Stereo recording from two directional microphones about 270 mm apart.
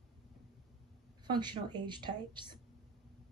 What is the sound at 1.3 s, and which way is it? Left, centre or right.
A woman's voice, centre.